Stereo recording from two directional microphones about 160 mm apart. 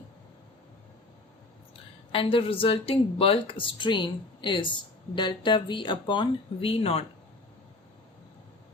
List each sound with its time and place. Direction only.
1.7 s a woman's voice: 35° left (ahead or behind)